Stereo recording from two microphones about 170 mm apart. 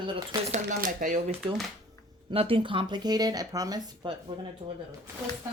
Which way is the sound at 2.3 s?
35° right (ahead or behind).